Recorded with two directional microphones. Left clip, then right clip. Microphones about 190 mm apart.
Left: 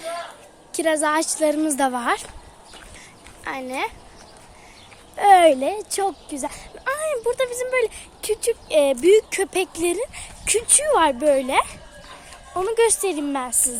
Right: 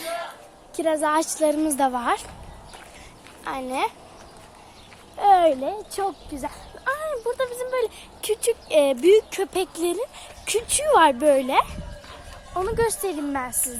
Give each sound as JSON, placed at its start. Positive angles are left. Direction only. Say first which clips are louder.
{"t": 0.7, "sound": "speech", "louder": "left 1 dB", "side_deg": 10}
{"t": 3.4, "sound": "a woman's voice", "louder": "right 1 dB", "side_deg": 0}
{"t": 5.1, "sound": "speech", "louder": "left 4 dB", "side_deg": 30}
{"t": 8.2, "sound": "speech", "louder": "left 1 dB", "side_deg": 5}
{"t": 10.8, "sound": "a woman's voice", "louder": "right 2 dB", "side_deg": -5}
{"t": 12.5, "sound": "speech", "louder": "left 4 dB", "side_deg": 20}